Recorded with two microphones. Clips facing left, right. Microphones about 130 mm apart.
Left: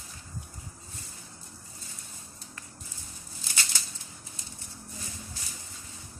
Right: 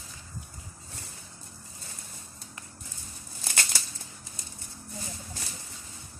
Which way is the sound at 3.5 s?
60° right (ahead or behind).